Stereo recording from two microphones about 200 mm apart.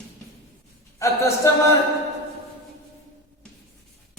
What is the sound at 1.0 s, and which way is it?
Speech, 15° left (ahead or behind).